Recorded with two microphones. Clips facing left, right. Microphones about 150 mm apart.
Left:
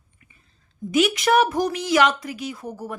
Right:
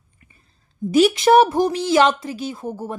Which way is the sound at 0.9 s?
35° right (ahead or behind).